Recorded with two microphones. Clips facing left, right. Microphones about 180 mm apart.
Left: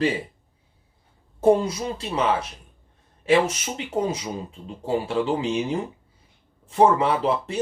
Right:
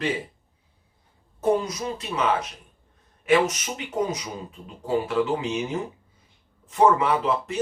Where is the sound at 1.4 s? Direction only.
30° left (ahead or behind).